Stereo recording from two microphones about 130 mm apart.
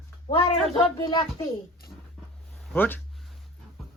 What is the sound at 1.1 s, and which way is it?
Speech, 35° left (ahead or behind).